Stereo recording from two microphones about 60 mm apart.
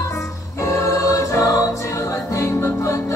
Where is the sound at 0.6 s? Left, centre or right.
Left.